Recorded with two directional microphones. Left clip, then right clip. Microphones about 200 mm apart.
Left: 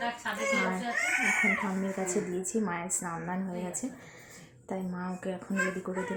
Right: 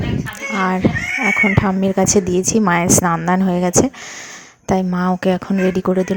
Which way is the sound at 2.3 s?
45° right (ahead or behind).